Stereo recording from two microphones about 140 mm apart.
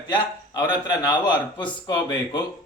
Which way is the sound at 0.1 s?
30° left (ahead or behind).